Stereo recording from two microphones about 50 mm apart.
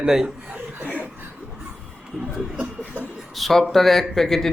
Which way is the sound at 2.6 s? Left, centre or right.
Right.